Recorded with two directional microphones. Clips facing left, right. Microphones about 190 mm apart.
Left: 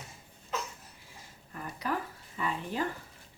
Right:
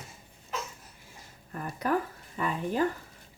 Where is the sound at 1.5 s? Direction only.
50° right (ahead or behind).